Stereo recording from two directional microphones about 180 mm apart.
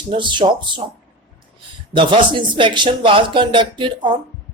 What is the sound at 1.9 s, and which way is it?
Speech, 25° right (ahead or behind).